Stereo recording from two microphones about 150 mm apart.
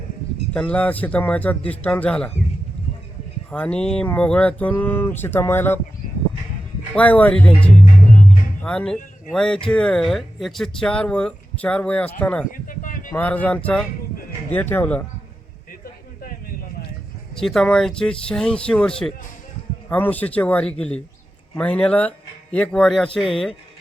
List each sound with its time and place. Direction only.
0.5 s speech: 10° left (ahead or behind)
3.5 s speech: 10° left (ahead or behind)
6.9 s speech: 10° left (ahead or behind)
12.5 s a sound: 65° left (ahead or behind)
13.1 s speech: 10° left (ahead or behind)
17.4 s speech: centre (ahead or behind)